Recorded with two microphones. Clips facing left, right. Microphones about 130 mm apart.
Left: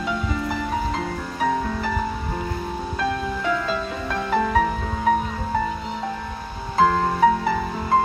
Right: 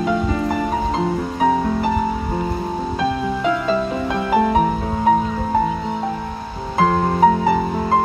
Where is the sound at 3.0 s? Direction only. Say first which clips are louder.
Right 4 dB; 20° right (ahead or behind).